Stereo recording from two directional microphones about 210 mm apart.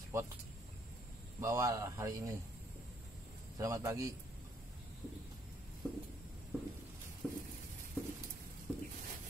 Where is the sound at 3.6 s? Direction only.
15° right (ahead or behind).